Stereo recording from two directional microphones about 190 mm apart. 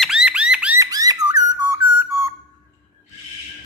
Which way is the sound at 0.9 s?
20° right (ahead or behind).